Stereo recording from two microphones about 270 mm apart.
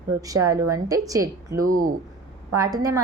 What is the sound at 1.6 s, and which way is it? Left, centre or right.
Speech, right.